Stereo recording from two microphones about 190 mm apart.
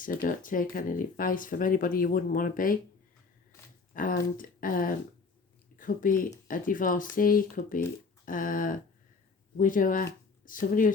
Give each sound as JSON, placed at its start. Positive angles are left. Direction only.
{"t": 0.0, "sound": "speech", "side_deg": 45}
{"t": 3.9, "sound": "speech", "side_deg": 45}